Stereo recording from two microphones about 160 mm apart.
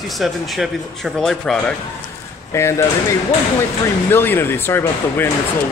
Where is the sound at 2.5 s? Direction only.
15° left (ahead or behind).